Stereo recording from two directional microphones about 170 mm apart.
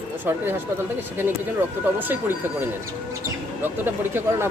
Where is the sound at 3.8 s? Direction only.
15° right (ahead or behind).